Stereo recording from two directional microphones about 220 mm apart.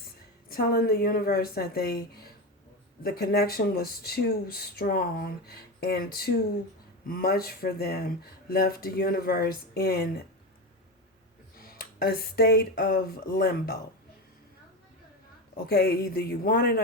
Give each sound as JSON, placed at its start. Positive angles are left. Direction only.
{"t": 0.4, "sound": "speech", "side_deg": 45}
{"t": 11.5, "sound": "speech", "side_deg": 45}
{"t": 15.5, "sound": "speech", "side_deg": 45}